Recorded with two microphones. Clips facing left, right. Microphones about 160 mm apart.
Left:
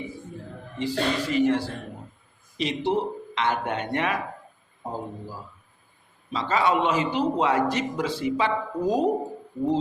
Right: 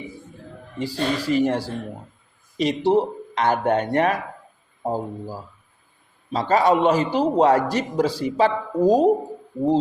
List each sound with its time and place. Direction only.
0.8 s a man's voice: 40° right (ahead or behind)